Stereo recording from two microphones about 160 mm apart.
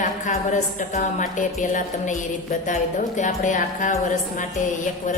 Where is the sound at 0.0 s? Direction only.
50° left (ahead or behind).